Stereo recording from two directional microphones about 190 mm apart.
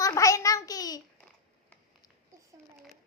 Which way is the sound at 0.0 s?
15° left (ahead or behind).